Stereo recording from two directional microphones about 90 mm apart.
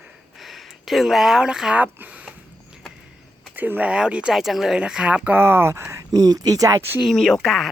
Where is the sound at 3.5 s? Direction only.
20° right (ahead or behind); by 6.8 s 40° right (ahead or behind).